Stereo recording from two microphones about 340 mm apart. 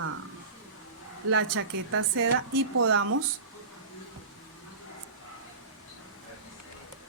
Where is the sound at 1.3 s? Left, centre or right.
Right.